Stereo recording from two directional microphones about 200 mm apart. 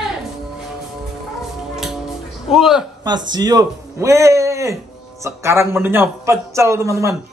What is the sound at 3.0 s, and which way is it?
Mantra, 20° right (ahead or behind).